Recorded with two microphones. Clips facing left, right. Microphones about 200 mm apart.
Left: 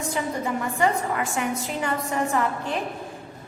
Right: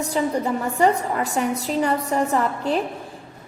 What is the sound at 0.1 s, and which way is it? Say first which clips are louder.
A woman's voice: right 5 dB; 35° right (ahead or behind).